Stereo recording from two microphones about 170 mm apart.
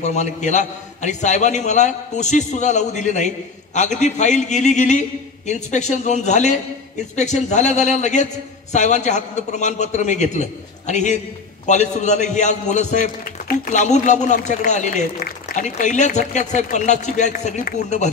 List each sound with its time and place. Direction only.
0.0 s a man's voice: 45° left (ahead or behind)
15.2 s applause: 60° left (ahead or behind)
15.6 s a man's voice: 45° left (ahead or behind)